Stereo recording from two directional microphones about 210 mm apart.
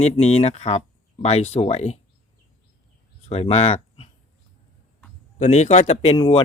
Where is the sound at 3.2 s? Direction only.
30° left (ahead or behind).